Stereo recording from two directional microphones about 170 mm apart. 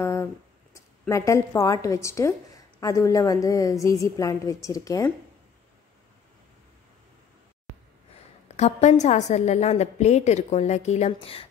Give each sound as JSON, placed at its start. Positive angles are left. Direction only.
{"t": 0.0, "sound": "a sound", "side_deg": 15}
{"t": 0.7, "sound": "a woman's voice", "side_deg": 15}
{"t": 8.5, "sound": "a woman's voice", "side_deg": 40}